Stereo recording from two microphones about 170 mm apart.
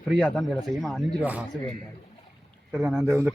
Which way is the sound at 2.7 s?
Centre (ahead or behind).